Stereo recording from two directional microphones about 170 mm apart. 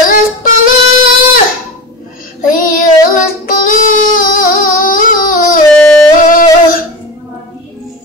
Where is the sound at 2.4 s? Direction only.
55° left (ahead or behind).